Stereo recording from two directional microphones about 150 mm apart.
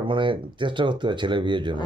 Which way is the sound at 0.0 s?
35° right (ahead or behind).